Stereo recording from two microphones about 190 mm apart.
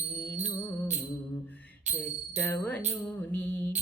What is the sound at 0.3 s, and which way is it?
Music, 35° right (ahead or behind).